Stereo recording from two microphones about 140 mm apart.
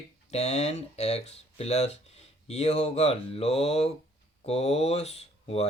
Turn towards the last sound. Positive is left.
turn(degrees=50)  # may be behind; listen again after turning